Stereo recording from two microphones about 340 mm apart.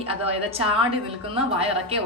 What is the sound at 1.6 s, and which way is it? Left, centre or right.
Speech, centre.